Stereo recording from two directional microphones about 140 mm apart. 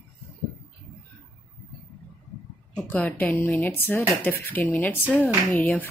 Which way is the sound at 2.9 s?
10° left (ahead or behind).